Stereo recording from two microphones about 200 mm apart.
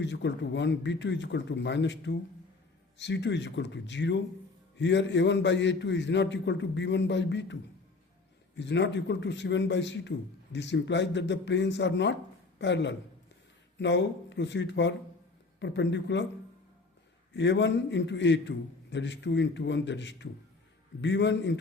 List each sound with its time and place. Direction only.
0.0 s a man's voice: 60° left (ahead or behind)
17.3 s a man's voice: 60° left (ahead or behind)